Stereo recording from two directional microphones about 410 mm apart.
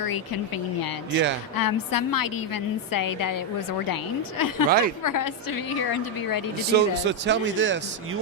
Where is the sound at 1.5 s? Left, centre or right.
Left.